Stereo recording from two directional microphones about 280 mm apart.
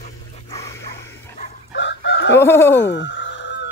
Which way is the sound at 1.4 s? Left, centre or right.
Left.